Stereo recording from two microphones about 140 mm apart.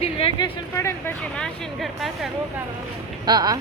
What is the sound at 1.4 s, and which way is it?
Speech, centre (ahead or behind).